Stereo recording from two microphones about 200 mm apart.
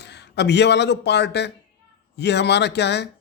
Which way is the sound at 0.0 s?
60° left (ahead or behind).